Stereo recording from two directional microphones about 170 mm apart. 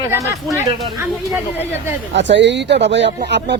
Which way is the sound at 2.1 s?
90° right.